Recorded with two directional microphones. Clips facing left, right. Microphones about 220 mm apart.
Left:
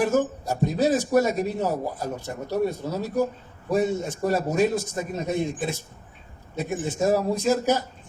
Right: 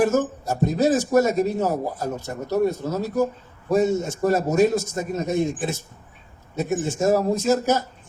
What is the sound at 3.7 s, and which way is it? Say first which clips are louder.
A man's voice: right 3 dB; 45° right (ahead or behind).